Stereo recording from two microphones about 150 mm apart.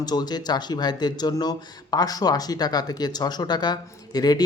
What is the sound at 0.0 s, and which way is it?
Speech, 25° left (ahead or behind).